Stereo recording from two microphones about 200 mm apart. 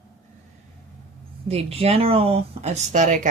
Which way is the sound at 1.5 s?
30° right (ahead or behind).